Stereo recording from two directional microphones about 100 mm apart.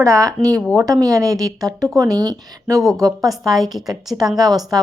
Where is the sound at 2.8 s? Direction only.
Centre (ahead or behind).